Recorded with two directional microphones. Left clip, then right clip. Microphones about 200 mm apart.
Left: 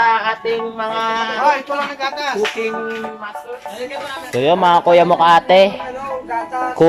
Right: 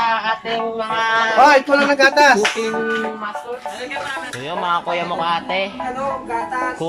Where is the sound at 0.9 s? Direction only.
15° left (ahead or behind).